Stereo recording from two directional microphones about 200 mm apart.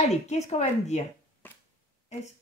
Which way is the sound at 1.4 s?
10° left (ahead or behind).